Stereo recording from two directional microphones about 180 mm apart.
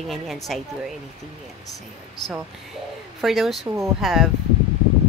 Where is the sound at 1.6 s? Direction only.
20° left (ahead or behind).